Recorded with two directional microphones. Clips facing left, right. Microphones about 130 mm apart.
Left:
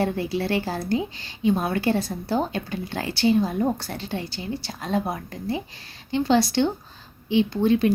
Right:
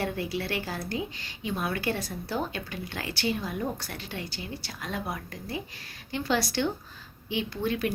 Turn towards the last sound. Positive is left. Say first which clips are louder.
# left 9 dB
turn(degrees=25)  # may be behind; listen again after turning